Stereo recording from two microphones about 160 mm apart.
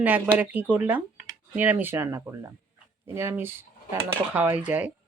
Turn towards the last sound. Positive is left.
turn(degrees=-10)  # may be behind; listen again after turning